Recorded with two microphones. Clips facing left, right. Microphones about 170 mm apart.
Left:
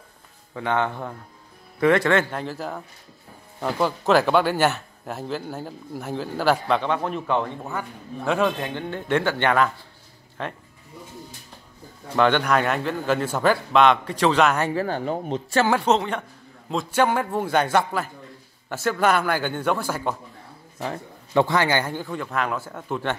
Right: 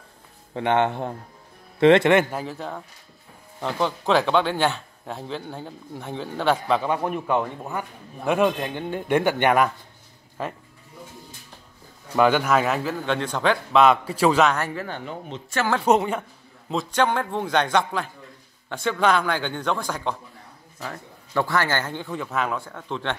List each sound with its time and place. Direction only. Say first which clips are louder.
0.6 s speech: right 3 dB; 20° right (ahead or behind)
2.3 s a man's voice: left 1 dB; centre (ahead or behind)
12.2 s a man's voice: right 1 dB; 5° right (ahead or behind)
14.7 s speech: left 7 dB; 35° left (ahead or behind)
15.8 s a man's voice: right 2 dB; 10° right (ahead or behind); by 20.2 s 5° left (ahead or behind)
20.8 s a man's voice: left 5 dB; 25° left (ahead or behind); by 23.1 s 10° left (ahead or behind)